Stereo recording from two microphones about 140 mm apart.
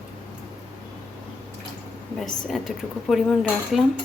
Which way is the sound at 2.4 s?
Centre (ahead or behind).